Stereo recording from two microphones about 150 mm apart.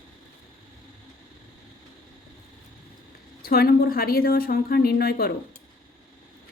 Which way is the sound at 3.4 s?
90° left.